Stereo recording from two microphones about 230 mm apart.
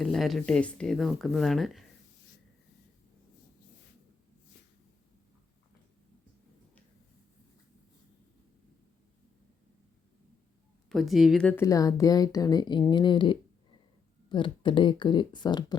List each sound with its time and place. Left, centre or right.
0.0 s speech: centre
10.8 s speech: centre